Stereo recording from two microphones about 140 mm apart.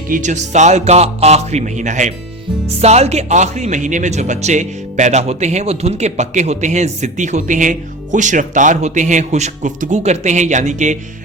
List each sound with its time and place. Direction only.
0.1 s speech: 60° right (ahead or behind)